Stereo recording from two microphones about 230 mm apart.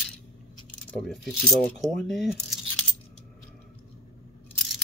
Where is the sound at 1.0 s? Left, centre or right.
Centre.